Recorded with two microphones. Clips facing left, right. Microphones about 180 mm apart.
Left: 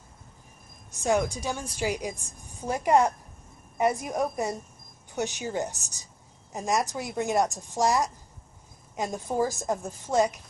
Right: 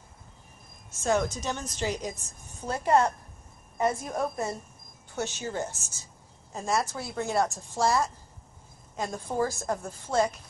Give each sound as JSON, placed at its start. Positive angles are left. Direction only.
{"t": 0.9, "sound": "a woman's voice", "side_deg": 15}